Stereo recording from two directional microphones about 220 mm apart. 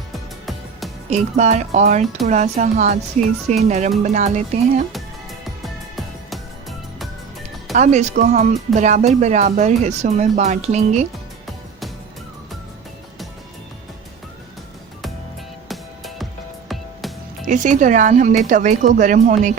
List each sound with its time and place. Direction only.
0.1 s music: centre (ahead or behind)
1.1 s speech: 30° right (ahead or behind)
5.6 s music: centre (ahead or behind)
7.7 s speech: 35° right (ahead or behind)
15.7 s music: centre (ahead or behind)
17.4 s speech: 35° right (ahead or behind)